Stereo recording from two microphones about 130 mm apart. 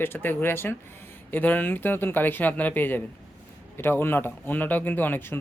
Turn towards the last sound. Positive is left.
turn(degrees=15)  # may be behind; listen again after turning